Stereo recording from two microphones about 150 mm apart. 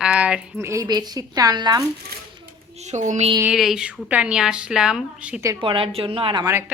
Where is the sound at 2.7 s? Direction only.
50° right (ahead or behind).